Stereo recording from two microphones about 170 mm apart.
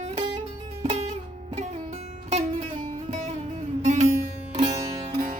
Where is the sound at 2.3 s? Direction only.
35° right (ahead or behind).